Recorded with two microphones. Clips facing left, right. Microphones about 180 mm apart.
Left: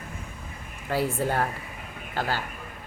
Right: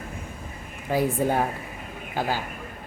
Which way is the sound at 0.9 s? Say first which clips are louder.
Right 3 dB; 15° right (ahead or behind).